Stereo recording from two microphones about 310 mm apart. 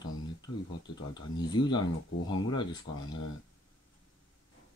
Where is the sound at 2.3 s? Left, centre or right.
Centre.